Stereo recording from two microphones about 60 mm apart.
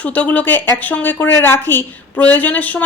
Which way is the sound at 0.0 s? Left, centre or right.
Left.